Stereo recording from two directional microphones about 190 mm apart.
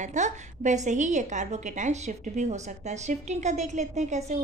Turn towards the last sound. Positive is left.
turn(degrees=-35)  # may be behind; listen again after turning